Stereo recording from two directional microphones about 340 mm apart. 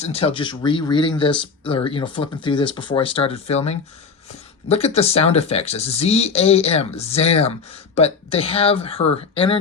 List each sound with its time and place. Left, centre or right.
0.0 s speech: centre